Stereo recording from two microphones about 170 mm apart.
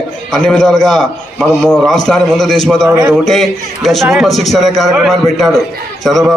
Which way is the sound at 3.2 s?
Centre (ahead or behind).